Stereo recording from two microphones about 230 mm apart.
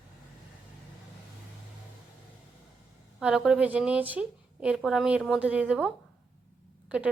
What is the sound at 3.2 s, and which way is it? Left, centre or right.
A woman's voice, centre.